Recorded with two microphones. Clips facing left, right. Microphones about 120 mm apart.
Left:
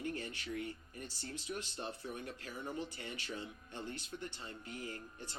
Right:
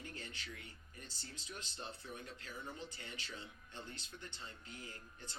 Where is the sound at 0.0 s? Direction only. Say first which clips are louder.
Left 9 dB; 60° left (ahead or behind).